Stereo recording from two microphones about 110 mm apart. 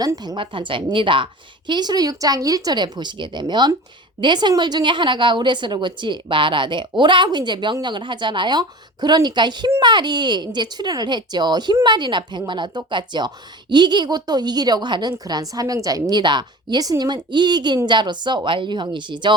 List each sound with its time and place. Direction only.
0.0 s a woman's voice: 35° right (ahead or behind)